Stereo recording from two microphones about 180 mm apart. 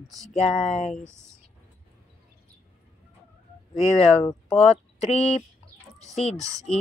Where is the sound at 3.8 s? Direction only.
35° left (ahead or behind).